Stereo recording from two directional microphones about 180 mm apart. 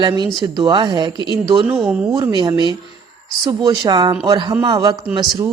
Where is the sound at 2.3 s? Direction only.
25° right (ahead or behind).